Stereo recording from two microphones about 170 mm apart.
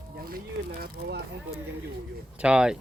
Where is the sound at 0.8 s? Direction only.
70° right (ahead or behind).